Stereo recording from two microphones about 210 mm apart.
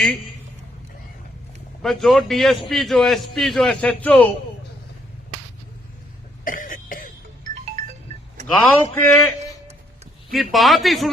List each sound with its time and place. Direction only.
1.8 s a man's voice: centre (ahead or behind)
6.4 s cough: 40° left (ahead or behind)
8.5 s a man's voice: 10° left (ahead or behind)
10.3 s a man's voice: centre (ahead or behind)